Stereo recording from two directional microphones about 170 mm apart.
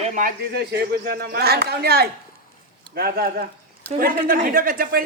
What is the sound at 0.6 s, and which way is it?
Speech, 70° right (ahead or behind).